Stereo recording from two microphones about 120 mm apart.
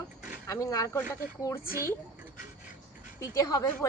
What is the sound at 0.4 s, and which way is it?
A woman's voice, 25° left (ahead or behind).